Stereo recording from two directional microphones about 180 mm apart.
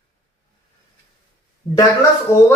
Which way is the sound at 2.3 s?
15° left (ahead or behind).